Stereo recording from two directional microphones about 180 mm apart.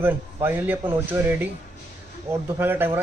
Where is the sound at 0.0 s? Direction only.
10° right (ahead or behind).